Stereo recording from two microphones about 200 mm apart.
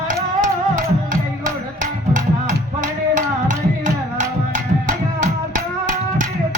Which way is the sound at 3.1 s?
40° right (ahead or behind).